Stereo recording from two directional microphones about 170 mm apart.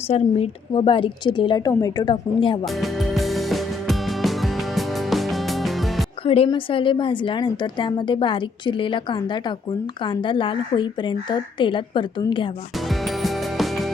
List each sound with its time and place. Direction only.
0.1 s a woman's voice: 30° left (ahead or behind)
2.8 s music: centre (ahead or behind)
6.2 s a woman's voice: 35° left (ahead or behind)
13.2 s music: centre (ahead or behind)